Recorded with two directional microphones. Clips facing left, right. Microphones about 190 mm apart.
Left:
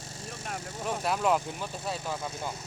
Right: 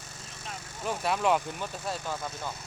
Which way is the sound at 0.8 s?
Centre (ahead or behind).